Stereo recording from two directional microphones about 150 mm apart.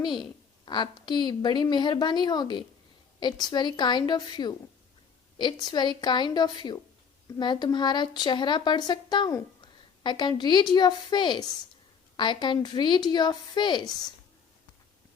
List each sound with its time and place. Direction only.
0.6 s a woman's voice: 30° left (ahead or behind)